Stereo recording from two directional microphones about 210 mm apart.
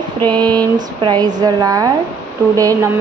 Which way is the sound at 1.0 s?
20° right (ahead or behind).